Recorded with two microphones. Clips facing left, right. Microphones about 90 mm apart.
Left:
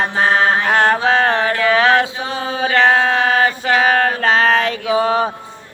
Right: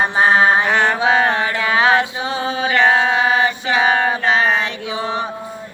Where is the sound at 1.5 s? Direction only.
20° right (ahead or behind).